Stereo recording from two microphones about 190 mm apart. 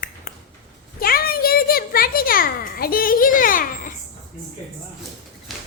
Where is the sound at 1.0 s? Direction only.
50° left (ahead or behind).